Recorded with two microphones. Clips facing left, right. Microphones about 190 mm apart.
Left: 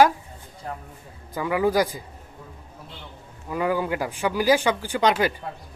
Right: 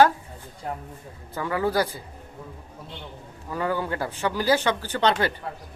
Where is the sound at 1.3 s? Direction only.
10° left (ahead or behind).